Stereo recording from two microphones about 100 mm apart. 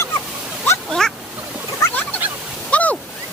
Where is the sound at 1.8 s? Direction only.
15° left (ahead or behind).